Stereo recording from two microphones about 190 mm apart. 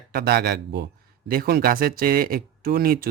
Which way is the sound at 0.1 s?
55° right (ahead or behind).